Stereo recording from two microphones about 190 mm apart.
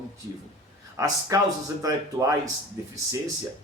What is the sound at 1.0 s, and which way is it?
Speech, 15° right (ahead or behind).